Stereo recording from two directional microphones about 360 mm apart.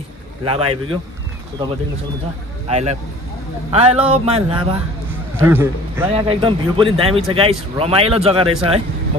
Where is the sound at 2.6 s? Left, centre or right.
Centre.